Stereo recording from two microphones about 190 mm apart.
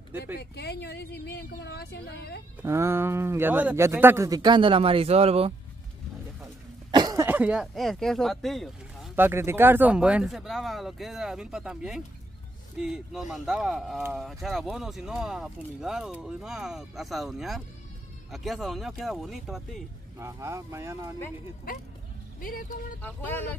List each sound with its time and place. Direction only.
0.4 s speech: 60° left (ahead or behind)
2.6 s speech: 15° right (ahead or behind); by 5.5 s 30° right (ahead or behind)
6.4 s throat clearing: 20° right (ahead or behind); by 9.1 s centre (ahead or behind)
9.1 s speech: 10° right (ahead or behind)
20.2 s speech: 15° right (ahead or behind)
22.4 s speech: 45° left (ahead or behind)
23.0 s speech: 10° left (ahead or behind)